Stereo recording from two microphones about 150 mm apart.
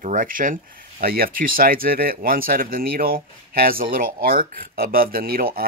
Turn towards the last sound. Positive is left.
turn(degrees=-75)  # may be behind; listen again after turning